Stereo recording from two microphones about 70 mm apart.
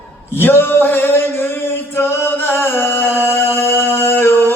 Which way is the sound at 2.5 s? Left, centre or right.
Left.